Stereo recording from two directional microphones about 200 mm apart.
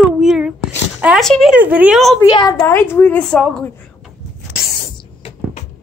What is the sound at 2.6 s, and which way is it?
A woman's voice, 10° left (ahead or behind).